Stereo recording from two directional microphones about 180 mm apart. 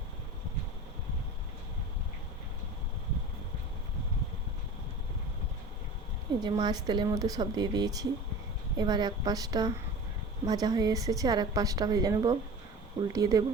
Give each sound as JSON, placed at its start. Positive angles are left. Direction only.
{"t": 6.4, "sound": "a woman's voice", "side_deg": -25}